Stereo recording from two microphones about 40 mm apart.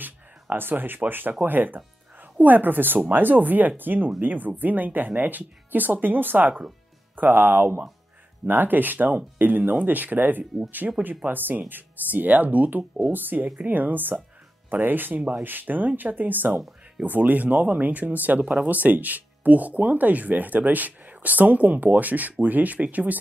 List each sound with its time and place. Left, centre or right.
0.0 s speech: right
8.5 s speech: right
10.8 s speech: right
11.2 s speech: right